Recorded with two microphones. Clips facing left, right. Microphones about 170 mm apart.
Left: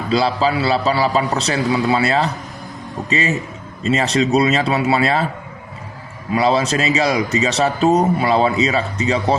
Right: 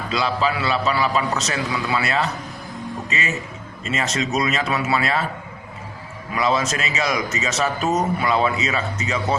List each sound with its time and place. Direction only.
0.1 s speech: 35° left (ahead or behind)
6.3 s speech: 35° left (ahead or behind)